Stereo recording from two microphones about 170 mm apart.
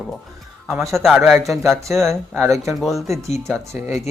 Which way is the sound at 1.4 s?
Centre (ahead or behind).